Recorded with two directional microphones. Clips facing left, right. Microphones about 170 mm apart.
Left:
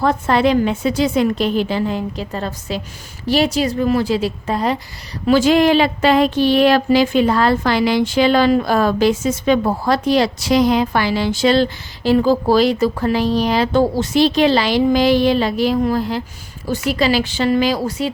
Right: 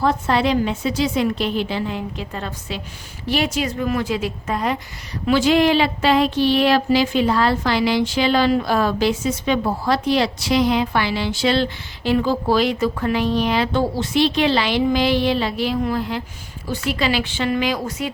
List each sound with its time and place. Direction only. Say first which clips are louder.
0.0 s a woman's voice: left 3 dB; 50° left (ahead or behind); by 4.8 s 35° left (ahead or behind)
5.2 s a woman's voice: left 3 dB; 45° left (ahead or behind)